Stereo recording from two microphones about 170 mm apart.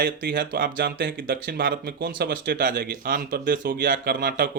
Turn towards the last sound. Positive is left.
turn(degrees=-55)  # may be behind; listen again after turning